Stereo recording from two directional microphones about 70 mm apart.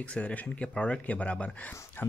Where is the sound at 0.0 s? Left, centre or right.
Left.